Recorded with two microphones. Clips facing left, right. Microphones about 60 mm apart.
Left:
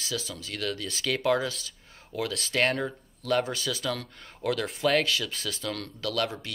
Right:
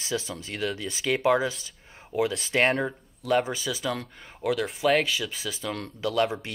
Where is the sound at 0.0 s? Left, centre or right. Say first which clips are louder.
Right 3 dB; right.